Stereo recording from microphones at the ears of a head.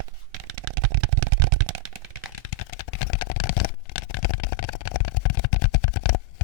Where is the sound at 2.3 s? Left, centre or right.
Left.